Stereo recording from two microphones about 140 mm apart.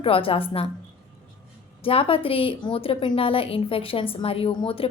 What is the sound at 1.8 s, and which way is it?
A woman's voice, 40° left (ahead or behind).